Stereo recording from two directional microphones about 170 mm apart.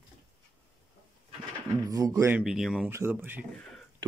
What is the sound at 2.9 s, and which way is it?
Speech, 15° right (ahead or behind).